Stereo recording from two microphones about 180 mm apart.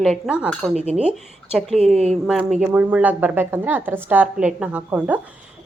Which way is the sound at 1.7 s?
35° right (ahead or behind).